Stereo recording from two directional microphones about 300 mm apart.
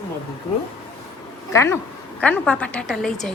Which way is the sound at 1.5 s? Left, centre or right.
Centre.